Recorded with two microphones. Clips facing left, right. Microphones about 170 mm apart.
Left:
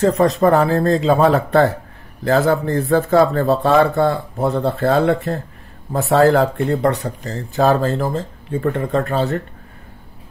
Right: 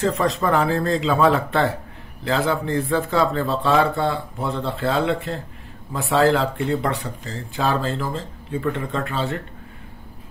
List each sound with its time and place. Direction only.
0.0 s speech: 40° left (ahead or behind)